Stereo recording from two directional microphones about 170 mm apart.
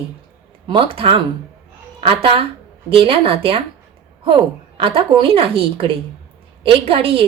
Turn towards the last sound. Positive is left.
turn(degrees=-35)  # may be behind; listen again after turning